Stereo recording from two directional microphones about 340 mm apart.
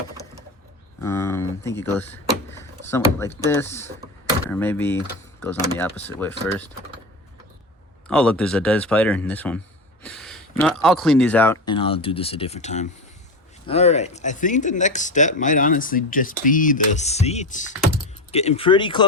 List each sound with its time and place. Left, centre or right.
1.0 s speech: centre
8.0 s speech: centre
10.0 s a sound: centre
10.6 s speech: centre